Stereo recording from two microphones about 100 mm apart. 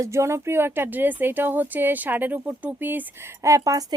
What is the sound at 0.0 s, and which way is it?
Speech, 30° right (ahead or behind).